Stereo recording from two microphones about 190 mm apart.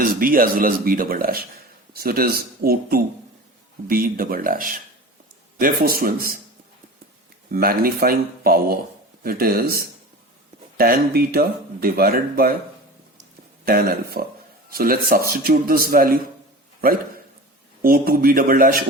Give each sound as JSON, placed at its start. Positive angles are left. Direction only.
{"t": 0.0, "sound": "speech", "side_deg": -50}
{"t": 7.5, "sound": "speech", "side_deg": -50}
{"t": 13.7, "sound": "speech", "side_deg": -50}
{"t": 17.8, "sound": "speech", "side_deg": -50}